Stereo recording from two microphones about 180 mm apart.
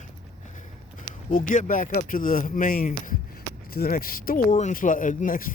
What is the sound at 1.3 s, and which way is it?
Speech, 45° left (ahead or behind).